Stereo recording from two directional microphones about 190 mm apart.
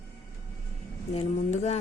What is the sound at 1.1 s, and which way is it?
Speech, 35° left (ahead or behind).